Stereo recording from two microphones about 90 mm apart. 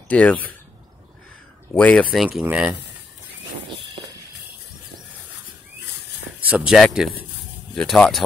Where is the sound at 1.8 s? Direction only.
15° left (ahead or behind).